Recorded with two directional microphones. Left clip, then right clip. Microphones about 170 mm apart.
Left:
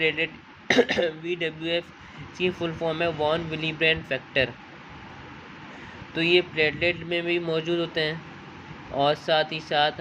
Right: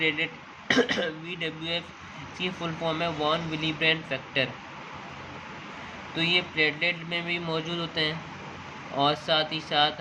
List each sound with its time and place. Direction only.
0.0 s speech: 20° left (ahead or behind)
6.1 s speech: 20° left (ahead or behind)